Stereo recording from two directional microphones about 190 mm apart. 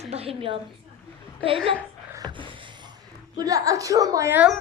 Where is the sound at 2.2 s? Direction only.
25° right (ahead or behind).